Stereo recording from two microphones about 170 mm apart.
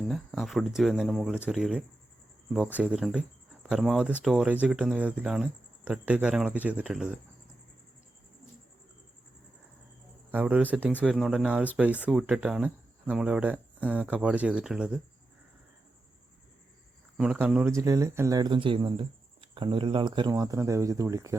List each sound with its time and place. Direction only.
0.1 s speech: centre (ahead or behind)
10.3 s speech: 10° right (ahead or behind)
17.2 s speech: 10° right (ahead or behind)